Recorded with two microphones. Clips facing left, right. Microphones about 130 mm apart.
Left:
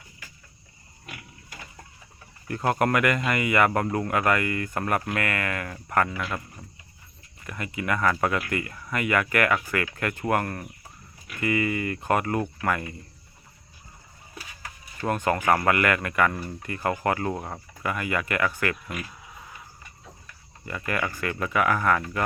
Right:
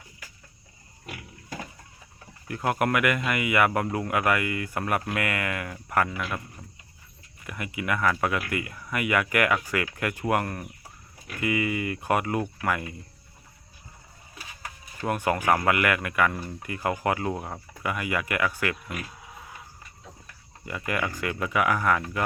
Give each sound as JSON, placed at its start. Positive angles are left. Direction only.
{"t": 2.5, "sound": "speech", "side_deg": -5}
{"t": 6.6, "sound": "a sound", "side_deg": 5}
{"t": 7.4, "sound": "speech", "side_deg": -15}
{"t": 15.0, "sound": "speech", "side_deg": -10}
{"t": 20.7, "sound": "speech", "side_deg": -15}